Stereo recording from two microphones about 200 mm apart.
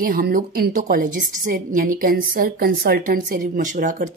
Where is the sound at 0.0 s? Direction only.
45° right (ahead or behind).